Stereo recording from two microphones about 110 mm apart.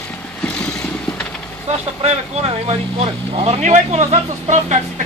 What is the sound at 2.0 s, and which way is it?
Speech, 65° right (ahead or behind).